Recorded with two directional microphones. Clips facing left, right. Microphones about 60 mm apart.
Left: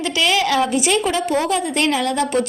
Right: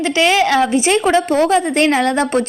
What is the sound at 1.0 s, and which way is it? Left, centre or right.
A woman's voice, right.